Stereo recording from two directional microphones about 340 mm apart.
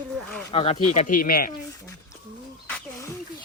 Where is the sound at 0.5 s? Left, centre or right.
Centre.